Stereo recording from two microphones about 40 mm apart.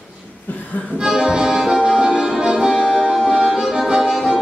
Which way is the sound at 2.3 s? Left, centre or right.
Centre.